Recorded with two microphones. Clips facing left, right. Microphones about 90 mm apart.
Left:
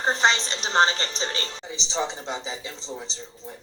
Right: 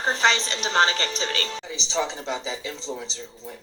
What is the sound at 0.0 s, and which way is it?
Speech, 30° left (ahead or behind).